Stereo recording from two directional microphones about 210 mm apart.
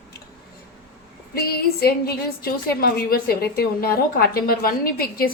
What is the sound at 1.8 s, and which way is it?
A woman's voice, 45° left (ahead or behind).